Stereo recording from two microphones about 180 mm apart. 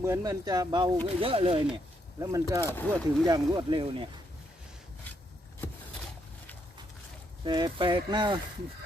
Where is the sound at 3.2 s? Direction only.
25° right (ahead or behind).